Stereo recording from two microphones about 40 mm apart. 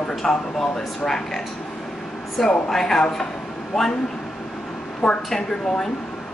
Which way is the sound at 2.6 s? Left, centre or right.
Centre.